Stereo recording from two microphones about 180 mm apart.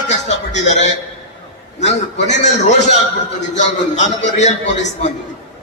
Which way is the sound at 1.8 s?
40° left (ahead or behind).